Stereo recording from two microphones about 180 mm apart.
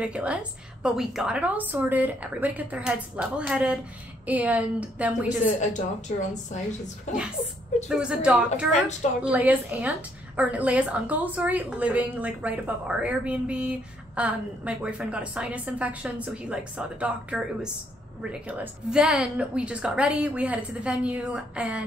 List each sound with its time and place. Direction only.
0.0 s a woman's voice: 5° right (ahead or behind)
5.6 s a woman's voice: 40° left (ahead or behind)
7.9 s a woman's voice: 5° right (ahead or behind)